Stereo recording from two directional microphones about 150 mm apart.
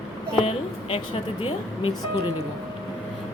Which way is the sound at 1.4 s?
40° left (ahead or behind).